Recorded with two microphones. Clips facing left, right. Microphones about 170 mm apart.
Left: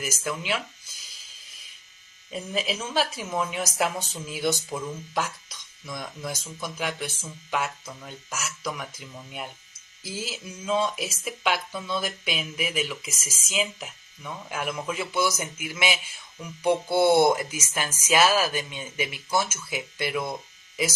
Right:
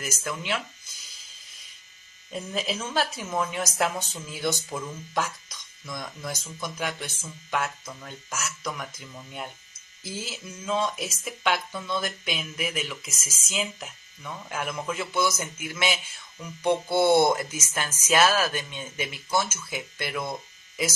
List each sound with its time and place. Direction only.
0.0 s speech: 5° left (ahead or behind)
2.3 s speech: 5° left (ahead or behind)
10.7 s speech: 5° left (ahead or behind)